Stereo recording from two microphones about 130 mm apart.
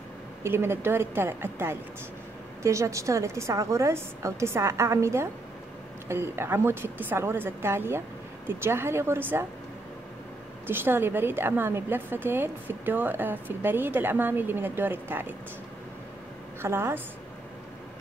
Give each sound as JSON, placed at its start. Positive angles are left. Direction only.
{"t": 0.4, "sound": "a woman's voice", "side_deg": -20}
{"t": 10.7, "sound": "a woman's voice", "side_deg": -15}
{"t": 16.6, "sound": "a woman's voice", "side_deg": -20}